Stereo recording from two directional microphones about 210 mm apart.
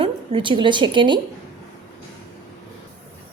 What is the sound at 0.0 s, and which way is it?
A woman's voice, 25° right (ahead or behind).